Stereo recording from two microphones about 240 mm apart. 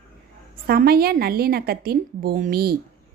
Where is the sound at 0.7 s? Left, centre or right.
Right.